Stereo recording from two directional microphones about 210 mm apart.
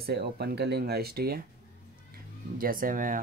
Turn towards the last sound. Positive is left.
turn(degrees=-40)  # may be behind; listen again after turning